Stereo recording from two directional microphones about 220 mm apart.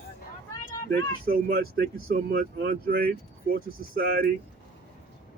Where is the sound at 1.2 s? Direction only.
40° right (ahead or behind).